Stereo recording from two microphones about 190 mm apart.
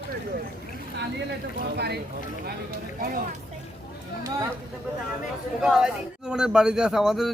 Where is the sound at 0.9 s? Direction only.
60° right (ahead or behind).